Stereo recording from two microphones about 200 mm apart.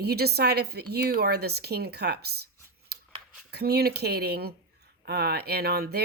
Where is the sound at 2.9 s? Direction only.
55° right (ahead or behind).